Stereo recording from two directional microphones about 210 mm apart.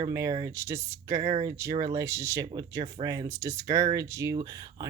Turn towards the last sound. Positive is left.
turn(degrees=-15)  # may be behind; listen again after turning